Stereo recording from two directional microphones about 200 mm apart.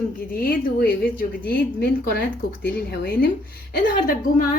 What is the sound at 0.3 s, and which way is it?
Speech, 50° left (ahead or behind).